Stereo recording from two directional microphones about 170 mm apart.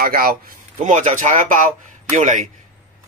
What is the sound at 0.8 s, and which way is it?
Speech, 45° right (ahead or behind).